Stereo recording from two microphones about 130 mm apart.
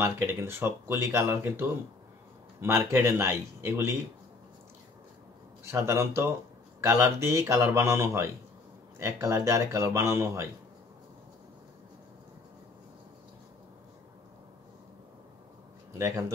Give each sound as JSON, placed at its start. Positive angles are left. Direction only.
{"t": 0.0, "sound": "speech", "side_deg": -20}
{"t": 5.7, "sound": "speech", "side_deg": -20}
{"t": 16.0, "sound": "speech", "side_deg": -25}